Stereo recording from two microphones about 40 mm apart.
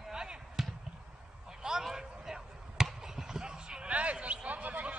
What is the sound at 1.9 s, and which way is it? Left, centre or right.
Basketball bounce, centre.